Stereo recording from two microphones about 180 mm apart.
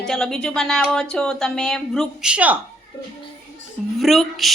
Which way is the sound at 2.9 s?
25° left (ahead or behind).